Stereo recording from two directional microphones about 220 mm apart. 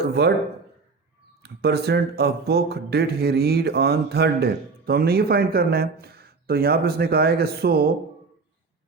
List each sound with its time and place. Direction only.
0.0 s speech: 45° right (ahead or behind)
1.4 s speech: 45° right (ahead or behind)